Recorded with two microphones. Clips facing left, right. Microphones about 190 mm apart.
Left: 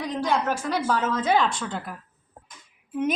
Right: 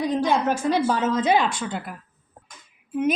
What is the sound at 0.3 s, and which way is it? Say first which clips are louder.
A woman's voice: right 3 dB; 25° right (ahead or behind).